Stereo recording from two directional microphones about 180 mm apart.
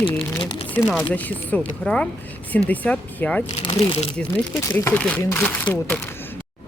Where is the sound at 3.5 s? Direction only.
35° left (ahead or behind).